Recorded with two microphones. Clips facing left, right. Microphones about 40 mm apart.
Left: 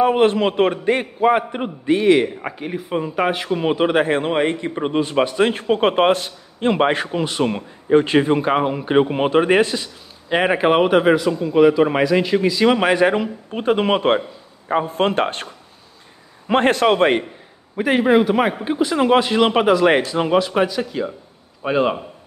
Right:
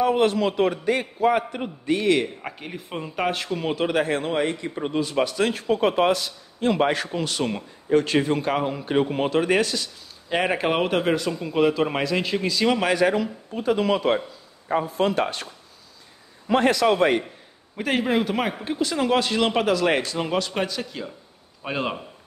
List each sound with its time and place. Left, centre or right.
0.0 s a man's voice: left; by 3.4 s centre
3.4 s a man's voice: left
12.6 s a man's voice: left
17.7 s a man's voice: centre